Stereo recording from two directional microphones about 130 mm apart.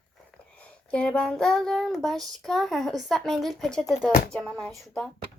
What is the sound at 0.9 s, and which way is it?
A woman's voice, 5° left (ahead or behind).